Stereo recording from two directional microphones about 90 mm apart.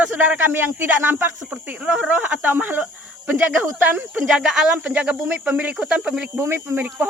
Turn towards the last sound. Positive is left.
turn(degrees=-20)  # may be behind; listen again after turning